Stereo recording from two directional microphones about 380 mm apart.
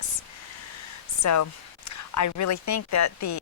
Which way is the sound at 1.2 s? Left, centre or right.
Left.